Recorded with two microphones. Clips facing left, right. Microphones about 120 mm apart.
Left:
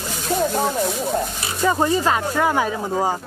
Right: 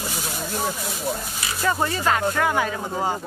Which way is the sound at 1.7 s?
15° left (ahead or behind).